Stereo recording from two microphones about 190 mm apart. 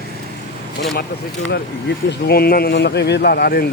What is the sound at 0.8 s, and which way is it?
Speech, 60° left (ahead or behind).